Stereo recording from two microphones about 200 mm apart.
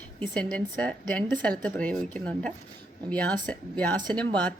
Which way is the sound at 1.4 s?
10° left (ahead or behind).